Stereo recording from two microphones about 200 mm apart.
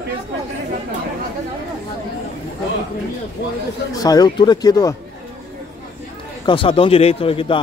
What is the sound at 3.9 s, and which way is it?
A man's voice, 20° left (ahead or behind).